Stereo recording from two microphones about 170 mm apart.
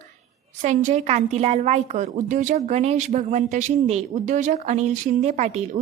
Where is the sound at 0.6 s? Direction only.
45° right (ahead or behind).